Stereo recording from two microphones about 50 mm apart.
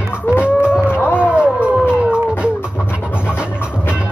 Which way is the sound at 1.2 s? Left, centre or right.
Right.